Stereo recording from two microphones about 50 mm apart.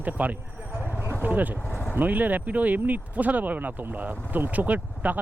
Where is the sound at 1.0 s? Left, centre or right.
Right.